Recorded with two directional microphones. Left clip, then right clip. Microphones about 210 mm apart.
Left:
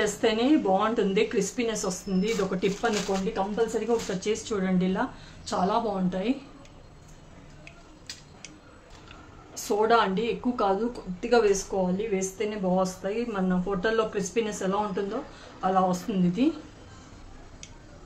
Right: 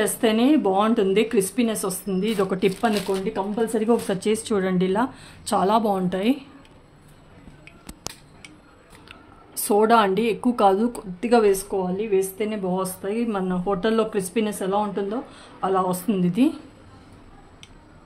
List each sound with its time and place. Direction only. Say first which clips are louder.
0.0 s speech: right 4 dB; 50° right (ahead or behind)
9.1 s speech: right 3 dB; 55° right (ahead or behind); by 15.1 s 35° right (ahead or behind)
15.6 s speech: right 2 dB; 55° right (ahead or behind)